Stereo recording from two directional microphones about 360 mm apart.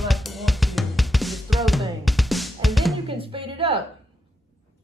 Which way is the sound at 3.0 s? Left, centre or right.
Centre.